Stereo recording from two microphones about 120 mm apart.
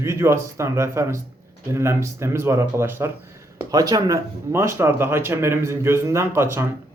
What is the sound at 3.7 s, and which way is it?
Speech, 30° right (ahead or behind).